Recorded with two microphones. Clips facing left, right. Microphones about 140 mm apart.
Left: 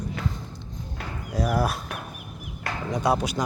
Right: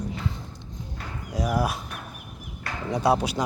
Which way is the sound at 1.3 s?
15° right (ahead or behind).